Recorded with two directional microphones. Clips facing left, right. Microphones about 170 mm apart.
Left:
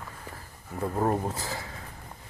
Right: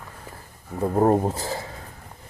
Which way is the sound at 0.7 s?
35° right (ahead or behind).